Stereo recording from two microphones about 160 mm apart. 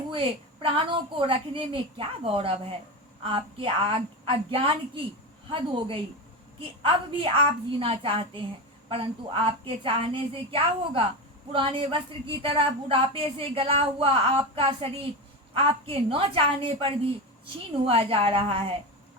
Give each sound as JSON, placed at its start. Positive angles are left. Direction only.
{"t": 0.1, "sound": "speech", "side_deg": -35}